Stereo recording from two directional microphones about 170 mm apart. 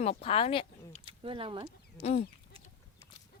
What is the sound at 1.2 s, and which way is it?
Speech, 30° right (ahead or behind).